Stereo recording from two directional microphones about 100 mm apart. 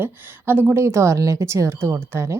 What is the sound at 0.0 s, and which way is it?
Speech, 20° right (ahead or behind).